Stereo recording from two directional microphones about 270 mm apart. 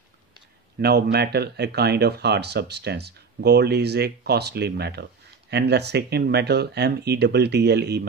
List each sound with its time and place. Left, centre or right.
0.7 s speech: right